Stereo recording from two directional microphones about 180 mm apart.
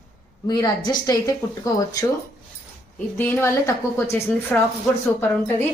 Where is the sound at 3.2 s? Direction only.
10° left (ahead or behind).